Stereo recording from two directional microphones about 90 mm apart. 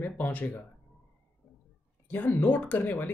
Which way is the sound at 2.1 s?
20° left (ahead or behind).